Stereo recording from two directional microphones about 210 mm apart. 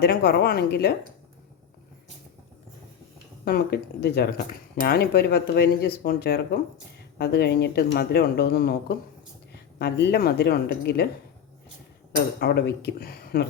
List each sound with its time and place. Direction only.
0.0 s speech: 50° left (ahead or behind)
3.4 s speech: 45° left (ahead or behind)
12.4 s speech: 50° left (ahead or behind)